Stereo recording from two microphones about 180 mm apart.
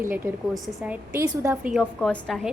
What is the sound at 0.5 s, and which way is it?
Speech, centre (ahead or behind).